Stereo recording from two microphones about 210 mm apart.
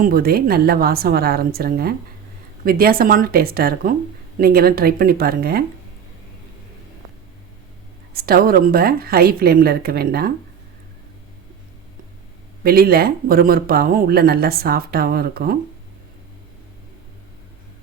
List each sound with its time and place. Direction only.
0.0 s speech: 45° right (ahead or behind)
8.1 s speech: 45° right (ahead or behind)
12.6 s speech: 45° right (ahead or behind)